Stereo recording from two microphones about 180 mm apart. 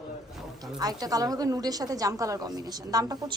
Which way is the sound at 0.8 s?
20° right (ahead or behind).